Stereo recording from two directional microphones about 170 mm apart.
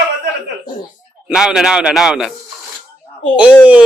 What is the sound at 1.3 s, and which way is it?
Speech, 5° right (ahead or behind).